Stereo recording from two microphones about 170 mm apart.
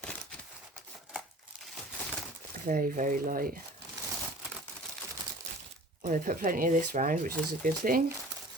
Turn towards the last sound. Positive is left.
turn(degrees=-55)  # may be behind; listen again after turning